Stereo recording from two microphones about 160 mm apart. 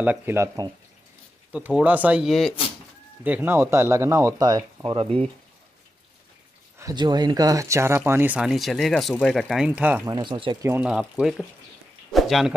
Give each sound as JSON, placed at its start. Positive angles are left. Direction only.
{"t": 0.0, "sound": "speech", "side_deg": -10}
{"t": 1.5, "sound": "speech", "side_deg": -10}
{"t": 3.3, "sound": "speech", "side_deg": -10}
{"t": 4.9, "sound": "speech", "side_deg": -35}
{"t": 6.8, "sound": "speech", "side_deg": -25}
{"t": 9.7, "sound": "speech", "side_deg": -10}
{"t": 10.0, "sound": "speech", "side_deg": -30}
{"t": 10.6, "sound": "speech", "side_deg": -10}